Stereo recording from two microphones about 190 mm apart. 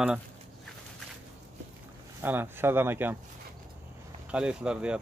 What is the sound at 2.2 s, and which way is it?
Speech, 10° right (ahead or behind).